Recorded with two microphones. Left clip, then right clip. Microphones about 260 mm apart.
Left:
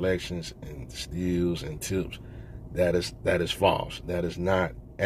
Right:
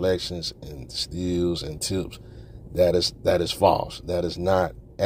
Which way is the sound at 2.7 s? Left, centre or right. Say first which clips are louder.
Right 5 dB; right.